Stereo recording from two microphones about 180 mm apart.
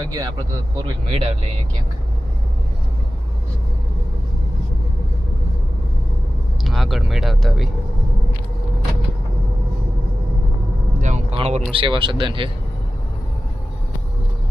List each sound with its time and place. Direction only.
0.0 s speech: 20° right (ahead or behind)
1.1 s speech: 35° right (ahead or behind)
6.7 s speech: centre (ahead or behind)
11.0 s speech: 40° right (ahead or behind)